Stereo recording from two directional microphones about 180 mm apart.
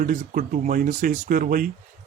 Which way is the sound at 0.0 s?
45° right (ahead or behind).